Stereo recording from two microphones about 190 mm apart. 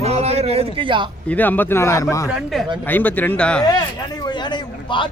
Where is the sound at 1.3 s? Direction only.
10° left (ahead or behind).